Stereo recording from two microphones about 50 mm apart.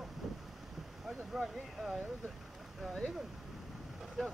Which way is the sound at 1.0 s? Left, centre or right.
Centre.